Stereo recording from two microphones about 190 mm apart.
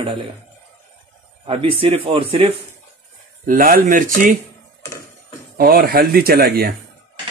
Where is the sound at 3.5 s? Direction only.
45° right (ahead or behind).